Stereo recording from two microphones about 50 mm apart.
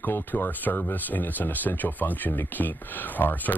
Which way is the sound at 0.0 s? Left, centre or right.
Left.